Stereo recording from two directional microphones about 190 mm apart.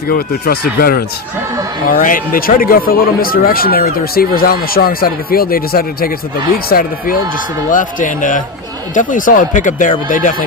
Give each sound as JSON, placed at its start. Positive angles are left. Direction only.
{"t": 0.1, "sound": "speech", "side_deg": 55}